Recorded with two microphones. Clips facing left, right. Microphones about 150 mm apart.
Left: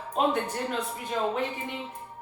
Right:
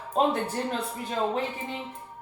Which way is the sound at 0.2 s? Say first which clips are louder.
Right 2 dB; 35° right (ahead or behind).